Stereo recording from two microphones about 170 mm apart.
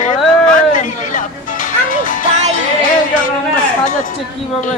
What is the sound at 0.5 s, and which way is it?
Music, 50° left (ahead or behind).